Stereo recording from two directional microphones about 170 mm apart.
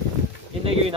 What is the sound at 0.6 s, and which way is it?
Speech, 35° right (ahead or behind).